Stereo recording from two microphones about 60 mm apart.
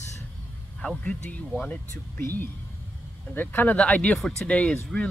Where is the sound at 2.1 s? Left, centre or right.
Left.